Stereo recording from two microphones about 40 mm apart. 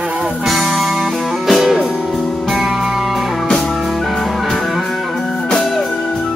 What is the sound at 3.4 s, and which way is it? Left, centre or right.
Music, centre.